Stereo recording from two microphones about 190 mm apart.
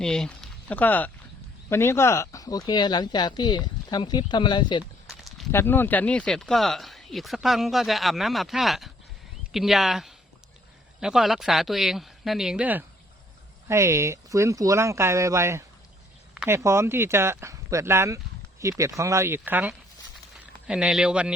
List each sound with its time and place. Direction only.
0.0 s speech: 5° left (ahead or behind); by 4.8 s 25° left (ahead or behind)
5.0 s a sound: centre (ahead or behind)
5.5 s speech: 10° left (ahead or behind); by 21.3 s 5° right (ahead or behind)